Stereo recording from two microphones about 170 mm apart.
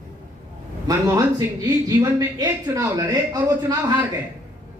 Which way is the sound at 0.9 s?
20° right (ahead or behind).